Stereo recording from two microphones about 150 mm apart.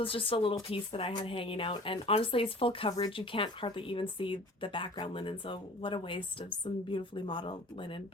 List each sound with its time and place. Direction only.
0.0 s speech: 35° left (ahead or behind)